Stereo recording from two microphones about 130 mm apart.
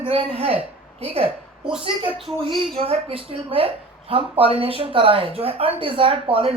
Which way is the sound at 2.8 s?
45° right (ahead or behind).